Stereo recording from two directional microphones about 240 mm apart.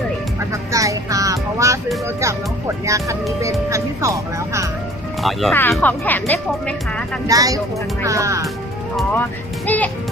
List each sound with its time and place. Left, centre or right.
0.7 s music: centre
2.2 s speech: centre
5.2 s speech: centre
7.3 s speech: centre
9.6 s a child's voice: centre